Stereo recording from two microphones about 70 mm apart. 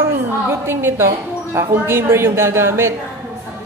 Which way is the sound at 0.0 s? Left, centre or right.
Right.